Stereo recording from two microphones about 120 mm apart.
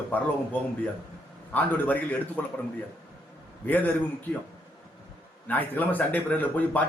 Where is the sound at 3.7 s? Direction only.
15° left (ahead or behind).